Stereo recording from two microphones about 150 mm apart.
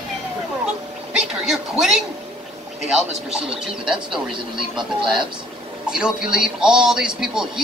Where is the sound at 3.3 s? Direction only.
5° right (ahead or behind).